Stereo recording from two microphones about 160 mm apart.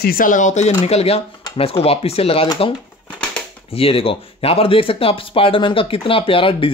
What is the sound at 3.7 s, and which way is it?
Speech, 35° left (ahead or behind).